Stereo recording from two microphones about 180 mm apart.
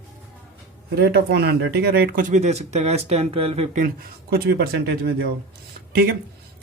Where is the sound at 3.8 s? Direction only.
55° right (ahead or behind).